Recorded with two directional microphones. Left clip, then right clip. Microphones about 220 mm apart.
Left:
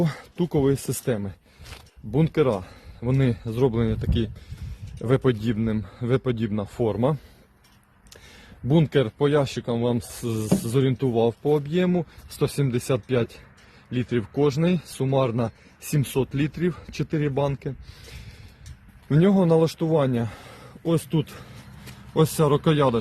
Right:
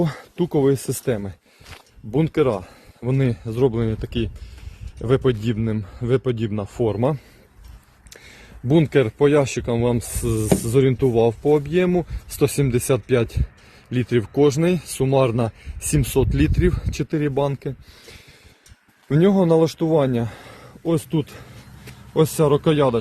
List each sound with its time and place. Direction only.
0.0 s a man's voice: 20° right (ahead or behind); by 23.0 s centre (ahead or behind)